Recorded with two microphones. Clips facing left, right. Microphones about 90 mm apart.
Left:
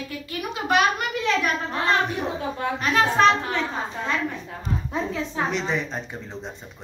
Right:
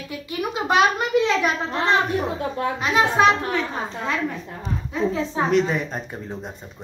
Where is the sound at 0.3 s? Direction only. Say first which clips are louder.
Right 2 dB; 20° right (ahead or behind).